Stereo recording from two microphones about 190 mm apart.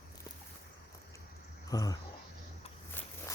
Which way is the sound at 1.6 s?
20° left (ahead or behind).